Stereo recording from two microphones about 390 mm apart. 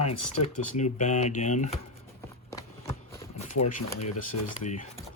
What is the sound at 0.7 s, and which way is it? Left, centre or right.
Speech, centre.